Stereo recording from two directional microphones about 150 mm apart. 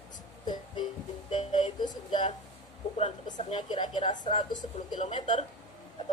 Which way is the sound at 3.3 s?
55° left (ahead or behind).